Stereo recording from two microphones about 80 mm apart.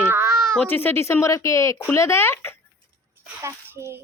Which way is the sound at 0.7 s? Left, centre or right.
Left.